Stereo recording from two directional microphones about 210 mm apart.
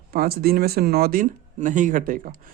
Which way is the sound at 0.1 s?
45° right (ahead or behind).